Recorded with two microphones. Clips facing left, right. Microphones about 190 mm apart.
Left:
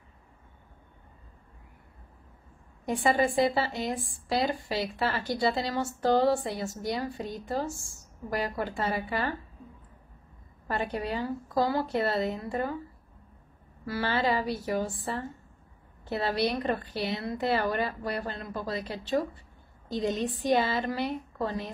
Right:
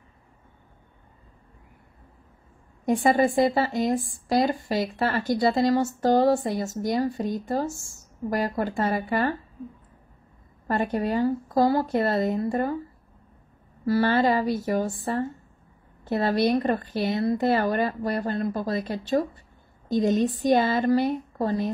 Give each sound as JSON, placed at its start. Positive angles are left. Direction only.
{"t": 2.8, "sound": "a woman's voice", "side_deg": -45}
{"t": 10.7, "sound": "a woman's voice", "side_deg": -45}
{"t": 13.8, "sound": "a woman's voice", "side_deg": -45}